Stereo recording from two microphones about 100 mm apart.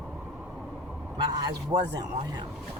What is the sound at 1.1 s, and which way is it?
Speech, 45° right (ahead or behind).